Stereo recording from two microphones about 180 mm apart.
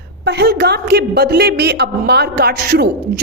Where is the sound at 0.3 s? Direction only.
65° right (ahead or behind).